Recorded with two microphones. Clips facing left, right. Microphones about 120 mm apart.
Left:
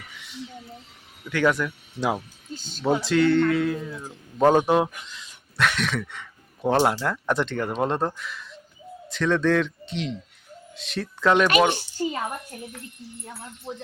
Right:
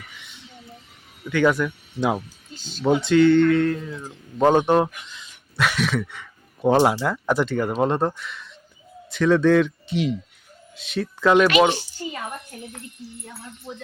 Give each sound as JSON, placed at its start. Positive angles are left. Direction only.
{"t": 0.1, "sound": "a sound", "side_deg": 0}
{"t": 1.3, "sound": "speech", "side_deg": 0}
{"t": 2.6, "sound": "speech", "side_deg": 50}
{"t": 2.8, "sound": "speech", "side_deg": 0}